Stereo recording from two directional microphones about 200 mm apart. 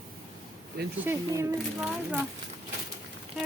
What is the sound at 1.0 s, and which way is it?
Speech, 10° right (ahead or behind).